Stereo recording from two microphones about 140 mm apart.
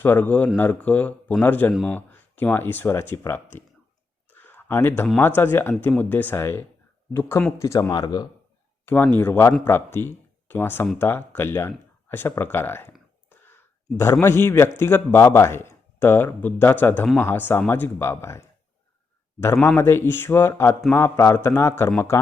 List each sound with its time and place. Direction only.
0.0 s speech: 15° left (ahead or behind)
4.3 s a sound: 15° left (ahead or behind)
5.2 s a man's voice: 15° left (ahead or behind); by 8.3 s 30° left (ahead or behind)
9.1 s speech: 15° left (ahead or behind)
13.3 s a sound: 15° left (ahead or behind)
14.8 s speech: 15° left (ahead or behind)
19.6 s a man's voice: 20° left (ahead or behind)